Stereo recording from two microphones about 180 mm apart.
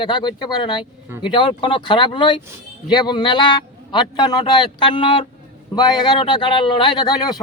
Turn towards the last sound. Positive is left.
turn(degrees=20)  # may be behind; listen again after turning